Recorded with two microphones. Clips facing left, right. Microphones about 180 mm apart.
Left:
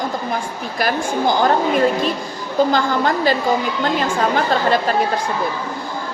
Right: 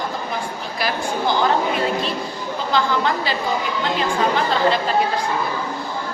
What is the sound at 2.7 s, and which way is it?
Speech, 45° left (ahead or behind).